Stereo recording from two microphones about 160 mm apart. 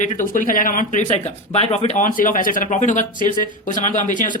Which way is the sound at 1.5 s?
40° left (ahead or behind).